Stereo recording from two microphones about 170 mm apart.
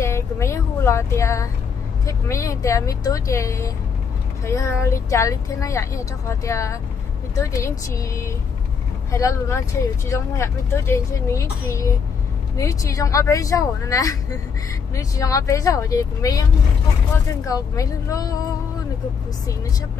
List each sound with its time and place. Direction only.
0.0 s a sound: 15° left (ahead or behind)
2.0 s speech: 20° left (ahead or behind)
17.5 s speech: 20° left (ahead or behind)